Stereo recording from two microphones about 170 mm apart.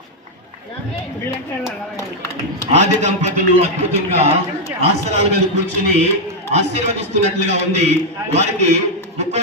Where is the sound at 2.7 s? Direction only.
45° right (ahead or behind).